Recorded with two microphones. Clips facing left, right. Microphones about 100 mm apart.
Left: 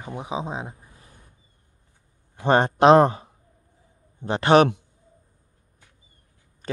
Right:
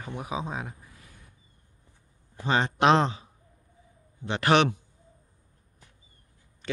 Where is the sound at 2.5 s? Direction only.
45° left (ahead or behind).